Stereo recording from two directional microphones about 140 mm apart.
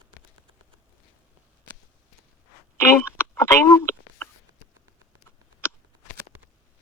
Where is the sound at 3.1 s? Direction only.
15° left (ahead or behind).